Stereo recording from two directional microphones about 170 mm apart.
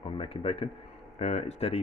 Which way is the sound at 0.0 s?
30° left (ahead or behind).